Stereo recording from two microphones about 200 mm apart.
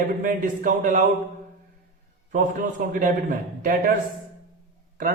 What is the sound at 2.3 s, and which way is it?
Speech, 40° right (ahead or behind).